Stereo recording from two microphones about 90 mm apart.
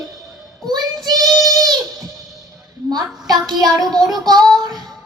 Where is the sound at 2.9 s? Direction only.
50° right (ahead or behind).